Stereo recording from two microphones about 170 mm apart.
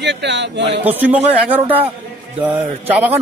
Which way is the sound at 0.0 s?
90° right.